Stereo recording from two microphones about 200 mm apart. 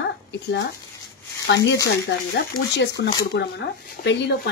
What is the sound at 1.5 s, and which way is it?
A woman's voice, 65° left (ahead or behind).